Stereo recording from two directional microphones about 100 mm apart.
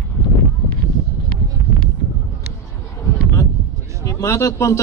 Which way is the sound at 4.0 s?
30° left (ahead or behind).